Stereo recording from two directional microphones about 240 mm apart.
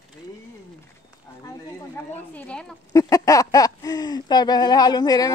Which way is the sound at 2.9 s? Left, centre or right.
Centre.